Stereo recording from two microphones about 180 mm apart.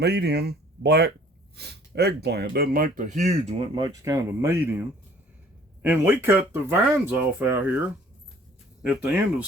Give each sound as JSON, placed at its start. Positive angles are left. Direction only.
{"t": 0.0, "sound": "speech", "side_deg": -65}
{"t": 3.8, "sound": "speech", "side_deg": -20}
{"t": 5.8, "sound": "speech", "side_deg": -10}
{"t": 8.8, "sound": "speech", "side_deg": -5}